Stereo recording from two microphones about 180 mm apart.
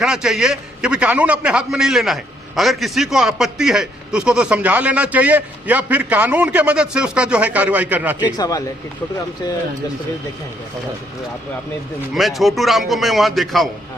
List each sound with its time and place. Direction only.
0.0 s a man's voice: 5° right (ahead or behind)
8.4 s speech: 20° left (ahead or behind)
12.1 s a man's voice: centre (ahead or behind)